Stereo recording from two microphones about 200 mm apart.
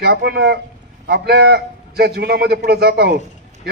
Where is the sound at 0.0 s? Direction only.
50° right (ahead or behind).